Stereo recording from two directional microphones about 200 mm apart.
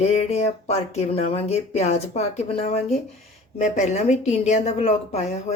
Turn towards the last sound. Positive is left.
turn(degrees=35)  # may be behind; listen again after turning